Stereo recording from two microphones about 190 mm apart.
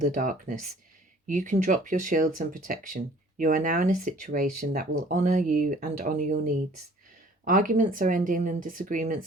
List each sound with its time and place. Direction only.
0.0 s speech: 45° right (ahead or behind)